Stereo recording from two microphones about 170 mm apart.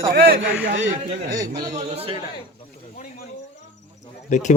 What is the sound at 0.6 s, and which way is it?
Speech, 90° right.